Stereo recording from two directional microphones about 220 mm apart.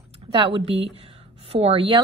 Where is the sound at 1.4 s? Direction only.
25° right (ahead or behind).